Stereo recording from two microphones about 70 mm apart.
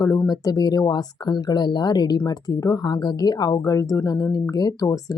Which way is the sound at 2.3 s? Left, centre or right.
Left.